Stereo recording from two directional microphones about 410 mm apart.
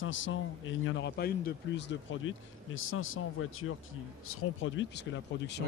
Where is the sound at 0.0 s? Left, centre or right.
Left.